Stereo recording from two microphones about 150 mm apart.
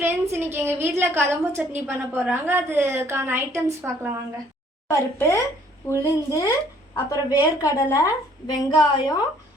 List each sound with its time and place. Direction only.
0.0 s a woman's voice: 15° right (ahead or behind)
4.9 s a woman's voice: 20° left (ahead or behind)